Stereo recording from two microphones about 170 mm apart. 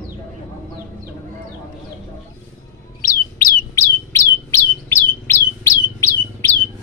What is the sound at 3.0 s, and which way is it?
Chirp, 55° left (ahead or behind).